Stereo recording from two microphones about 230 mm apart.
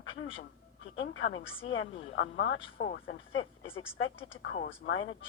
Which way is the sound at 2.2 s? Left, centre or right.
Left.